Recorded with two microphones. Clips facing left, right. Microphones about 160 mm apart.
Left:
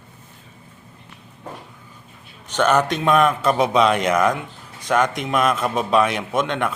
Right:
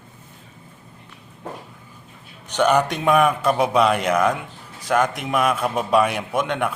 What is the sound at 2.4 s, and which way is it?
A man's voice, 15° right (ahead or behind).